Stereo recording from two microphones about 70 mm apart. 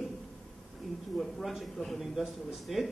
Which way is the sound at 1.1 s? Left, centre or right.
Centre.